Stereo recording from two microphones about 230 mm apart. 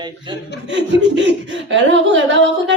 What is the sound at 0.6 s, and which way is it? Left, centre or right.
Speech, right.